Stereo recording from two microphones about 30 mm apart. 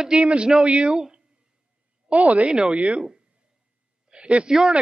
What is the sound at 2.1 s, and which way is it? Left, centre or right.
Speech, right.